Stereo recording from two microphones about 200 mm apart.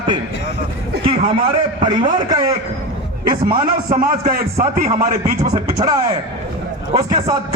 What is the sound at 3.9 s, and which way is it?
A man's voice, 45° right (ahead or behind).